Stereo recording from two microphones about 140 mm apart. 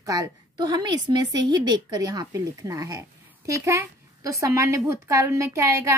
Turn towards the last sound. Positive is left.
turn(degrees=-20)  # may be behind; listen again after turning